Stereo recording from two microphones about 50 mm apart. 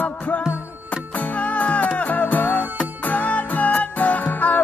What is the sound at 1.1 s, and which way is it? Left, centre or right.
Music, left.